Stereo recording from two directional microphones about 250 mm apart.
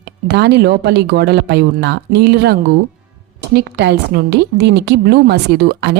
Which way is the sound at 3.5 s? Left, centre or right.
Right.